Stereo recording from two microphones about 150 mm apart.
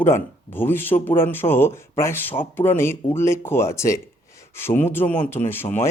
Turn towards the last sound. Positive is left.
turn(degrees=15)  # may be behind; listen again after turning